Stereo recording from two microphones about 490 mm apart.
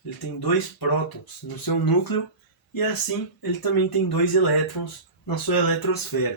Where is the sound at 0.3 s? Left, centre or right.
Left.